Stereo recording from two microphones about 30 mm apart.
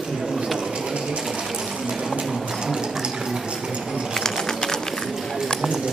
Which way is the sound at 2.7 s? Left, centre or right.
Right.